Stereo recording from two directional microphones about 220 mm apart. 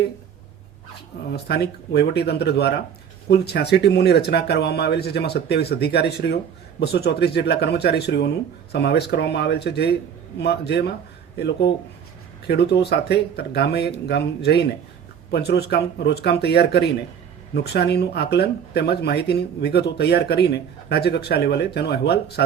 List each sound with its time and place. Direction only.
1.3 s speech: 45° left (ahead or behind)